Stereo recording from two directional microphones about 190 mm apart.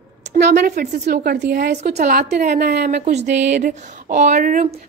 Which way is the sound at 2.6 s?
60° right (ahead or behind).